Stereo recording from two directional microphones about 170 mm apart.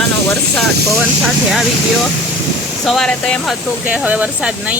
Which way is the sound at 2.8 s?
Centre (ahead or behind).